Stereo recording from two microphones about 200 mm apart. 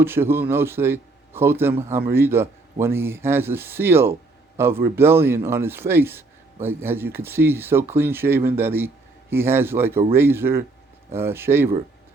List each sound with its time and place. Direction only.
0.0 s a man's voice: 10° right (ahead or behind)